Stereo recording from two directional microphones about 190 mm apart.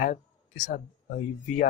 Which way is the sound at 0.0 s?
40° left (ahead or behind).